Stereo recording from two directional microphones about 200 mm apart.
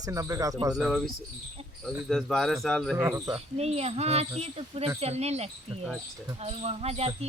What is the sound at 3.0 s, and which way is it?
Speech, 15° right (ahead or behind).